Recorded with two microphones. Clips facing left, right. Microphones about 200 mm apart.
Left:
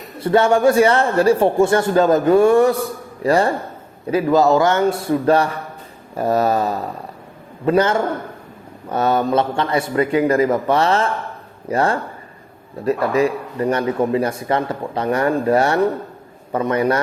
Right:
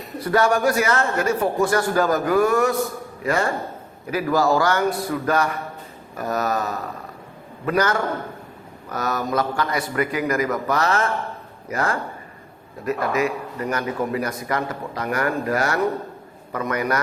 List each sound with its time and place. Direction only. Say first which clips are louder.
0.2 s a man's voice: left 5 dB; 25° left (ahead or behind)